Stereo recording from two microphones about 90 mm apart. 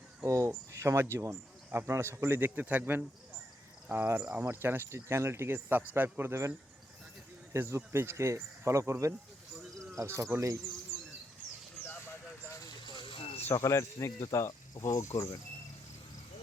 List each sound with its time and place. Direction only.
0.3 s speech: 35° right (ahead or behind)
7.5 s speech: 30° right (ahead or behind)
12.8 s vehicle: 65° left (ahead or behind); by 13.3 s 80° left
13.5 s speech: 30° left (ahead or behind)